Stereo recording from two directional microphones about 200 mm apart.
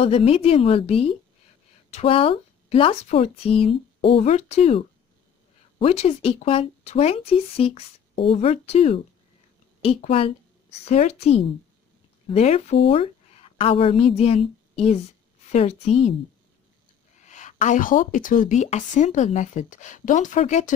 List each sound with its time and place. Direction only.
0.0 s a woman's voice: 30° left (ahead or behind)
15.4 s speech: 35° left (ahead or behind)
17.2 s speech: 35° left (ahead or behind)